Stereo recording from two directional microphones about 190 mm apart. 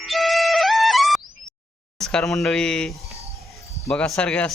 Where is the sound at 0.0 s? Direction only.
Centre (ahead or behind).